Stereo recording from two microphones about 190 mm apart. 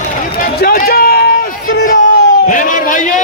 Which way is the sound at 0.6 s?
50° left (ahead or behind).